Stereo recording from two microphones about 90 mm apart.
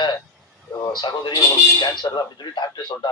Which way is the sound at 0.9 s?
55° left (ahead or behind).